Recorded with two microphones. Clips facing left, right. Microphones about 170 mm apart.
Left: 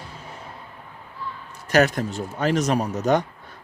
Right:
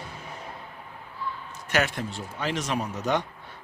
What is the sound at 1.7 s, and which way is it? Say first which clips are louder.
A man's voice: left 8 dB; 40° left (ahead or behind).